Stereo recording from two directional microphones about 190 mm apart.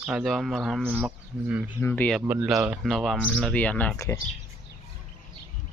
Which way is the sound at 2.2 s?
10° right (ahead or behind).